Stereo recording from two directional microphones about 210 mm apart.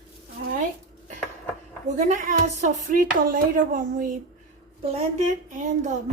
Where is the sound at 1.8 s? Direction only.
35° right (ahead or behind).